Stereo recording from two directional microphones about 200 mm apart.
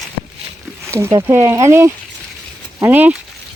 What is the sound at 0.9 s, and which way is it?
Speech, 15° right (ahead or behind).